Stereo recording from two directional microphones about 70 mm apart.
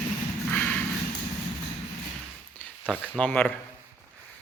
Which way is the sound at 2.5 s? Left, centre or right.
Left.